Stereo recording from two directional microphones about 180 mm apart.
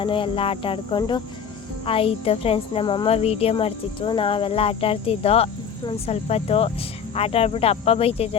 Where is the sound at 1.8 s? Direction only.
30° left (ahead or behind).